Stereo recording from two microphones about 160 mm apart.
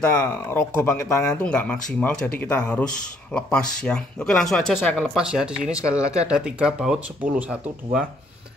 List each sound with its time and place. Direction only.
0.2 s speech: 10° left (ahead or behind)
1.3 s speech: 5° left (ahead or behind); by 7.5 s 10° right (ahead or behind)